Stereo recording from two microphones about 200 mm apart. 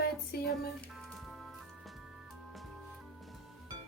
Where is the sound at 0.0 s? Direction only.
50° left (ahead or behind).